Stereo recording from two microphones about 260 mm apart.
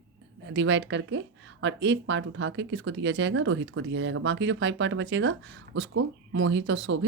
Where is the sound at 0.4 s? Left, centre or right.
Right.